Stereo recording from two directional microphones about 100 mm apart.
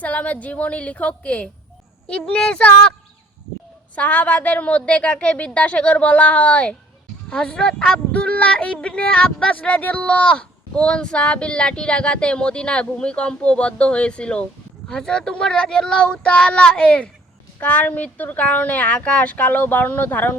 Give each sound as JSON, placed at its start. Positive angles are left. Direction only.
{"t": 0.0, "sound": "speech", "side_deg": 15}
{"t": 3.9, "sound": "speech", "side_deg": 15}